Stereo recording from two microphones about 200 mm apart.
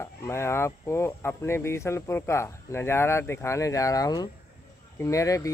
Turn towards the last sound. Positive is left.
turn(degrees=15)  # may be behind; listen again after turning